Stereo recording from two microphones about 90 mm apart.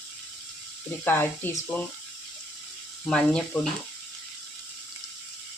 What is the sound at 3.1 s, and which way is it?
Speech, 10° left (ahead or behind).